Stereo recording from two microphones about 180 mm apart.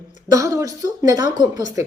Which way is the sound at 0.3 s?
20° right (ahead or behind).